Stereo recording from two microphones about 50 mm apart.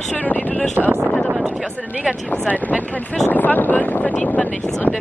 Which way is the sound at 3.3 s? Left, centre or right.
Left.